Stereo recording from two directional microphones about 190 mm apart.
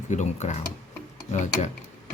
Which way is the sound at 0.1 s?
40° left (ahead or behind).